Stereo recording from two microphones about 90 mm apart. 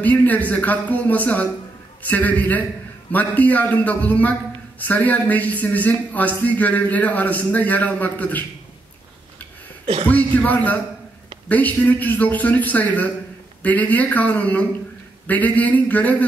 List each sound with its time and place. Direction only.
0.0 s a man's voice: 20° left (ahead or behind)
10.0 s a man's voice: 15° left (ahead or behind)